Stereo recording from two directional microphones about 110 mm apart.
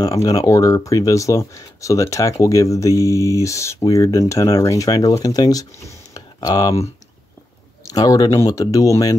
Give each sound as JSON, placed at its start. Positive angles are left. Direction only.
{"t": 0.0, "sound": "speech", "side_deg": 30}
{"t": 7.9, "sound": "speech", "side_deg": 35}